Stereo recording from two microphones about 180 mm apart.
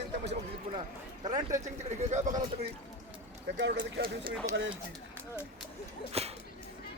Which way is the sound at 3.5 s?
85° right.